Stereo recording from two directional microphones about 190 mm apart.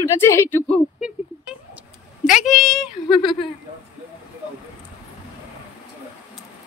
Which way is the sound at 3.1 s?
25° left (ahead or behind).